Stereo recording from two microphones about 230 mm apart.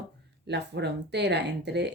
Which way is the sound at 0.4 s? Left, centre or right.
Right.